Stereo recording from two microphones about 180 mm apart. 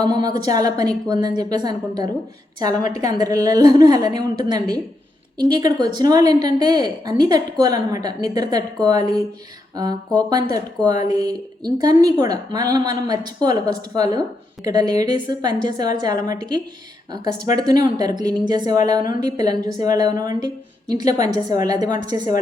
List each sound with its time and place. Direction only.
0.0 s a woman's voice: 20° right (ahead or behind)